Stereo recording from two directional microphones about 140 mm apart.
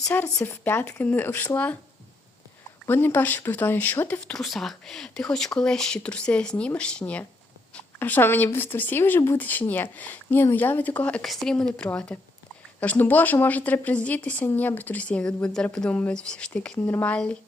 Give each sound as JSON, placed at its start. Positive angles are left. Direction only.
{"t": 0.0, "sound": "speech", "side_deg": 15}
{"t": 2.8, "sound": "speech", "side_deg": 15}